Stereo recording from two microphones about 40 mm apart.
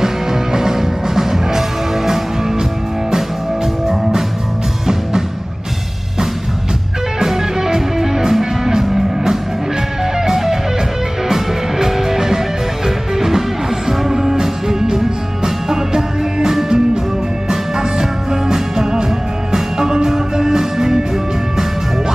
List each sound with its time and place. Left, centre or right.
0.0 s music: centre
7.2 s music: centre